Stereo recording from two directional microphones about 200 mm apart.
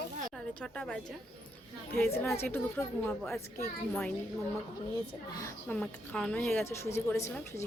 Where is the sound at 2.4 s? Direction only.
10° left (ahead or behind).